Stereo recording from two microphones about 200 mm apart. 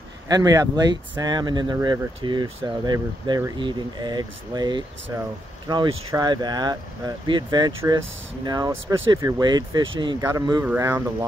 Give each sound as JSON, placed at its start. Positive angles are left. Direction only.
{"t": 0.3, "sound": "speech", "side_deg": -20}